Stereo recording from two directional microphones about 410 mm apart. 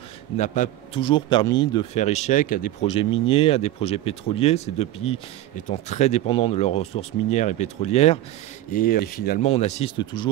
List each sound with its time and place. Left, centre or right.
0.4 s a man's voice: centre